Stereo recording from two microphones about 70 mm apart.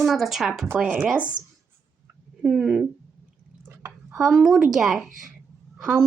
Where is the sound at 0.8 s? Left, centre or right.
Right.